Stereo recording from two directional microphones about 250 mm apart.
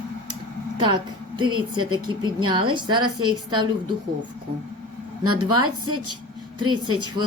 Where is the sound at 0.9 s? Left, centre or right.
Centre.